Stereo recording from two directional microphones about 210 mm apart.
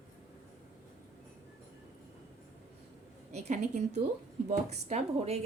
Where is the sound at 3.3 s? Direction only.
30° right (ahead or behind).